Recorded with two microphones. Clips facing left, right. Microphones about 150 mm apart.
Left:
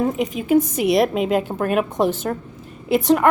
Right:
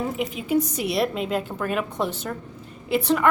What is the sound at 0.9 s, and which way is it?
A woman's voice, 65° left (ahead or behind).